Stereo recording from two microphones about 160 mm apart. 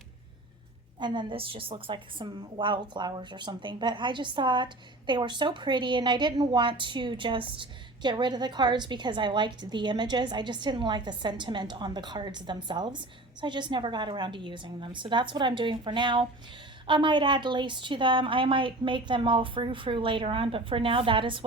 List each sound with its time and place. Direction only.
0.9 s a woman's voice: 30° right (ahead or behind)